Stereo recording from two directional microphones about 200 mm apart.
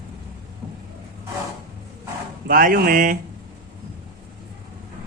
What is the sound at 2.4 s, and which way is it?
Speech, 45° right (ahead or behind).